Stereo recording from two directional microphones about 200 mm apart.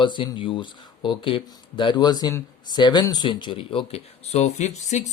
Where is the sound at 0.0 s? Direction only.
25° left (ahead or behind).